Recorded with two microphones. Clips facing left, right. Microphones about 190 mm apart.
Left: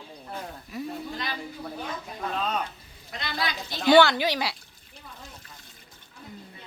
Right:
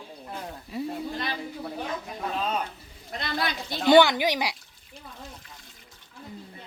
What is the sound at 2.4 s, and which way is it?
Speech, 10° right (ahead or behind).